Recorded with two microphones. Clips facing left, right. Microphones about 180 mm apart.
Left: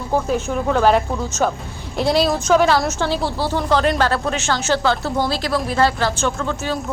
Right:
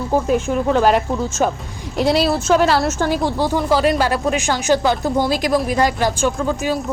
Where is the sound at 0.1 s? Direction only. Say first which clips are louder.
Right 2 dB; 5° right (ahead or behind).